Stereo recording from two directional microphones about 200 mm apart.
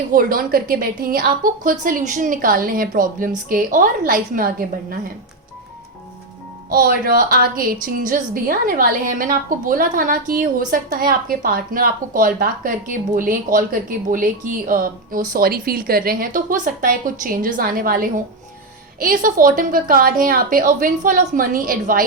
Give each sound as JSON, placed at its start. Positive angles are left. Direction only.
{"t": 0.1, "sound": "a woman's voice", "side_deg": -45}
{"t": 6.7, "sound": "a woman's voice", "side_deg": -45}